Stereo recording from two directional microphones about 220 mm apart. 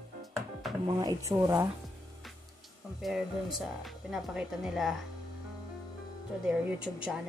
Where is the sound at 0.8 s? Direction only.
15° right (ahead or behind).